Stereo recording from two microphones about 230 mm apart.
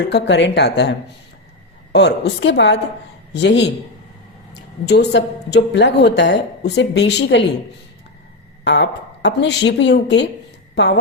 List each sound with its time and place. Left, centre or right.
0.0 s a woman's voice: left
8.6 s a woman's voice: left